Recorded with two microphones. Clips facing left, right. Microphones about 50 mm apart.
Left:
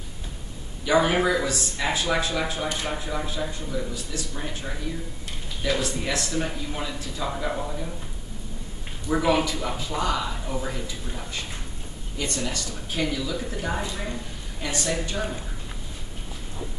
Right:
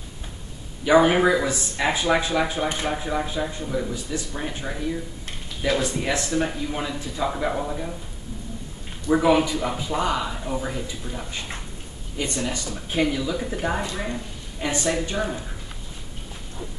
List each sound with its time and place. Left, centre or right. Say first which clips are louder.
0.8 s speech: right 4 dB; centre
9.1 s speech: right 4 dB; centre
13.9 s a sound: right 3 dB; centre
14.8 s speech: right 3 dB; centre